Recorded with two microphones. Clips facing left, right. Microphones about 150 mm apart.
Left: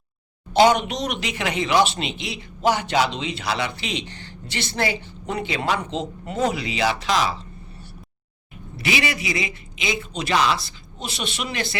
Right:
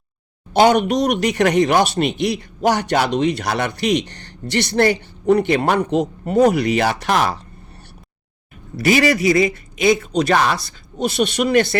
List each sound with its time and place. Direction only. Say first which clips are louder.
0.5 s speech: right 3 dB; 55° right (ahead or behind)
8.8 s a man's voice: right 10 dB; 45° right (ahead or behind)